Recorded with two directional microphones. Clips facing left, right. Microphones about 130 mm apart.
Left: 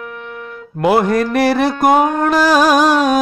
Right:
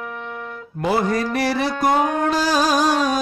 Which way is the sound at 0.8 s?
65° left (ahead or behind).